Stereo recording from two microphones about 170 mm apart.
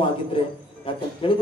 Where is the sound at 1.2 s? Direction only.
35° left (ahead or behind).